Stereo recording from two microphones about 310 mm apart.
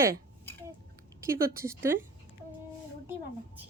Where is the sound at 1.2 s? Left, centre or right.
Centre.